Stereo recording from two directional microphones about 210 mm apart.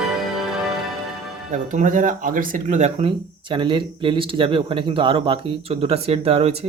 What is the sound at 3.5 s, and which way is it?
Speech, 20° right (ahead or behind).